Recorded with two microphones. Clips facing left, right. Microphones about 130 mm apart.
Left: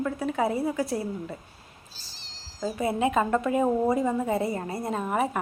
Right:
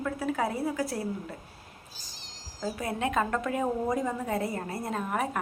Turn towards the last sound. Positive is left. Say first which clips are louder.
# left 4 dB
turn(degrees=5)  # may be behind; listen again after turning